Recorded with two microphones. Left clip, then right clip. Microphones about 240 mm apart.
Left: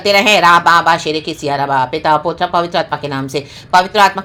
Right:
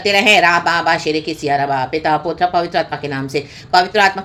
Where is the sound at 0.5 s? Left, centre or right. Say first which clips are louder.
Left 5 dB; centre.